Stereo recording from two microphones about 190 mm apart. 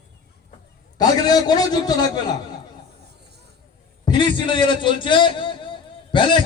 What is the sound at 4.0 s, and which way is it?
A man's voice, 25° left (ahead or behind).